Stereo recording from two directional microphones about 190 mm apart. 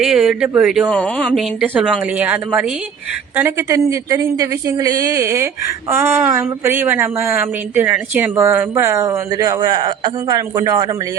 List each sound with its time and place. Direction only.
0.0 s speech: centre (ahead or behind)
1.6 s speech: 5° right (ahead or behind)